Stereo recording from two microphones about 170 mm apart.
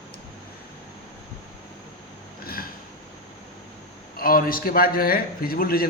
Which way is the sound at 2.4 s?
60° left (ahead or behind).